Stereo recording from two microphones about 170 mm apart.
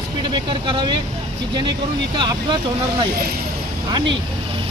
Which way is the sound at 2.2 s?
25° right (ahead or behind).